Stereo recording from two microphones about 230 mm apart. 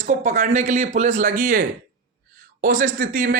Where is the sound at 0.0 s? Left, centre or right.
Right.